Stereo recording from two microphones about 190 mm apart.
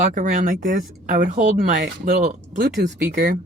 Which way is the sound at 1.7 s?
60° right (ahead or behind).